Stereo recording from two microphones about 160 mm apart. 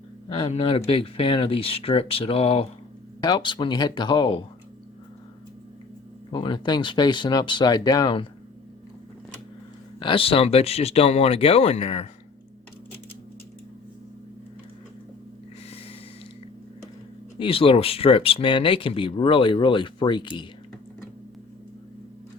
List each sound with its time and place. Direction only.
0.3 s speech: 35° left (ahead or behind)
3.2 s speech: 25° left (ahead or behind)
6.3 s speech: 30° left (ahead or behind)
10.0 s speech: 35° left (ahead or behind)
17.4 s speech: 35° left (ahead or behind)